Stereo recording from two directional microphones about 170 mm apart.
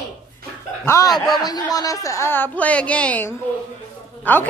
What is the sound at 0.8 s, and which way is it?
A man's voice, 20° left (ahead or behind).